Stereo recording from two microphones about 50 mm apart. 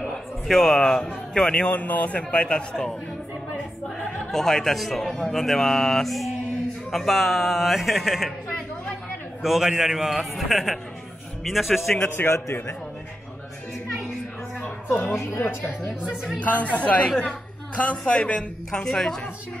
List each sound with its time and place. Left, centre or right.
0.1 s a man's voice: centre
1.8 s a man's voice: left; by 3.0 s centre
4.3 s a man's voice: centre
9.4 s a man's voice: centre
12.1 s speech: left
16.3 s a man's voice: left; by 19.2 s centre